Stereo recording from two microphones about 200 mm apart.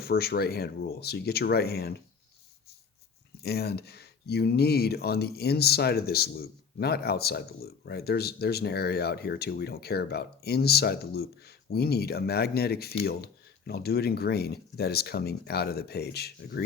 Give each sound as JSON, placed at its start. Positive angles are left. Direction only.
{"t": 0.0, "sound": "speech", "side_deg": 50}
{"t": 3.4, "sound": "speech", "side_deg": 55}